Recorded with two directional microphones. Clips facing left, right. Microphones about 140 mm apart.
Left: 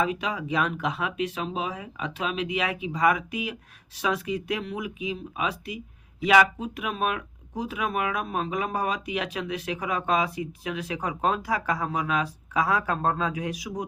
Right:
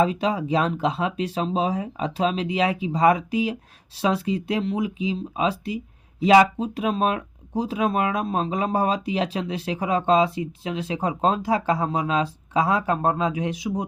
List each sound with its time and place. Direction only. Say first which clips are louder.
0.0 s speech: right 6 dB; 30° right (ahead or behind)